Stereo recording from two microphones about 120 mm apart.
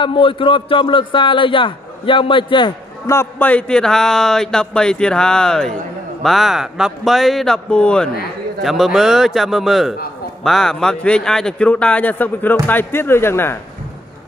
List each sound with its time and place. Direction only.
0.0 s a man's voice: 45° left (ahead or behind)
3.1 s a man's voice: 20° left (ahead or behind)